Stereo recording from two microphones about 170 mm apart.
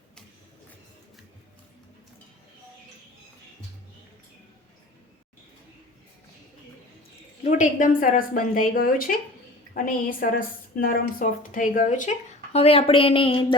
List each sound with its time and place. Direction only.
7.4 s a woman's voice: 50° left (ahead or behind)
12.5 s speech: 35° left (ahead or behind)